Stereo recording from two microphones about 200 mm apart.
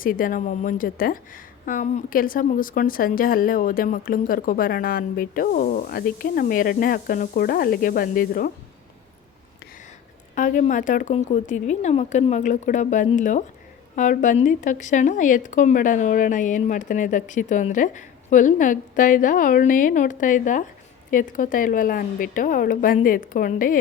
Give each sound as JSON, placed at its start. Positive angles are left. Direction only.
{"t": 0.0, "sound": "a woman's voice", "side_deg": 45}
{"t": 10.3, "sound": "a woman's voice", "side_deg": 40}